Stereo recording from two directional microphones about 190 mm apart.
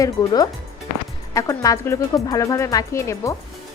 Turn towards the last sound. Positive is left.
turn(degrees=15)  # may be behind; listen again after turning